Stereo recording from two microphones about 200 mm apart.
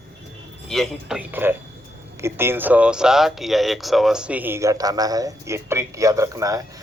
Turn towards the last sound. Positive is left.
turn(degrees=-15)  # may be behind; listen again after turning